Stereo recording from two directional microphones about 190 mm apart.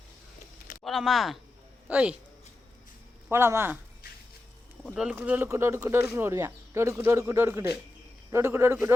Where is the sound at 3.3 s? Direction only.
10° right (ahead or behind).